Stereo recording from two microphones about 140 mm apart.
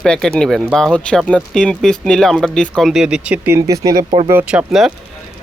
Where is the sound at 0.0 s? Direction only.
5° left (ahead or behind); by 3.6 s 10° right (ahead or behind).